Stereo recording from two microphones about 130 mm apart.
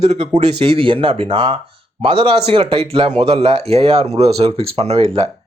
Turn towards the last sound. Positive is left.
turn(degrees=-50)  # may be behind; listen again after turning